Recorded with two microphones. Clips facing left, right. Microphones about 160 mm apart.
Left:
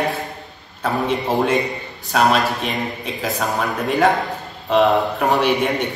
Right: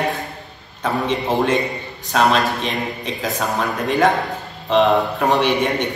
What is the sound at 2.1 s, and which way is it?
A man's voice, 5° left (ahead or behind).